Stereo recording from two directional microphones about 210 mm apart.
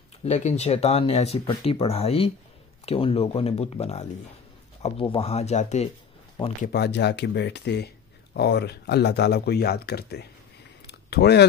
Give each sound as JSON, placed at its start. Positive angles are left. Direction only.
{"t": 0.2, "sound": "speech", "side_deg": 30}
{"t": 6.6, "sound": "speech", "side_deg": 50}
{"t": 10.9, "sound": "a sound", "side_deg": 50}